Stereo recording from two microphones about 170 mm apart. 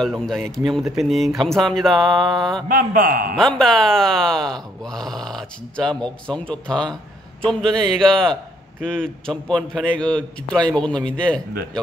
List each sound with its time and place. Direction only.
0.0 s speech: centre (ahead or behind)
2.7 s a man's voice: 55° right (ahead or behind)
3.3 s speech: 5° left (ahead or behind)